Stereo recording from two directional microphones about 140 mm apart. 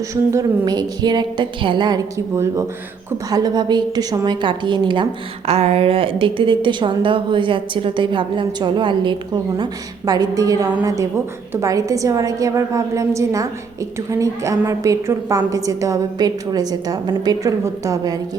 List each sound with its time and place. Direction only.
0.1 s a woman's voice: 20° right (ahead or behind)
5.5 s a woman's voice: 45° right (ahead or behind); by 18.2 s 25° right (ahead or behind)